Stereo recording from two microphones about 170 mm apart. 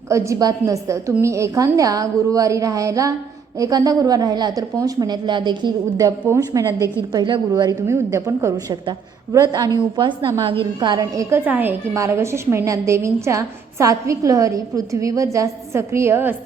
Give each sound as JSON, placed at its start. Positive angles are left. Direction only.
{"t": 0.1, "sound": "a woman's voice", "side_deg": -20}